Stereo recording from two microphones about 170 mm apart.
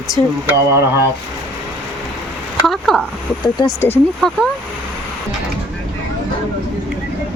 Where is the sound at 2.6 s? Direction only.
Centre (ahead or behind).